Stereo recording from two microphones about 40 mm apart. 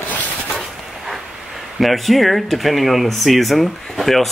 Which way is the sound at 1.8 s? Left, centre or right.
Centre.